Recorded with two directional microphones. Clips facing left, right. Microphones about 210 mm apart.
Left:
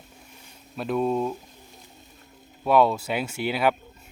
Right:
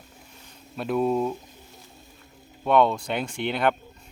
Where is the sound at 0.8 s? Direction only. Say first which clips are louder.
Right 1 dB; centre (ahead or behind).